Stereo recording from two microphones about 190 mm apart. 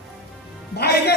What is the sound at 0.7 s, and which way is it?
Speech, 55° left (ahead or behind).